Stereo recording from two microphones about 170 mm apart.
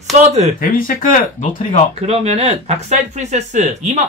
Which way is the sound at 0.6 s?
55° left (ahead or behind).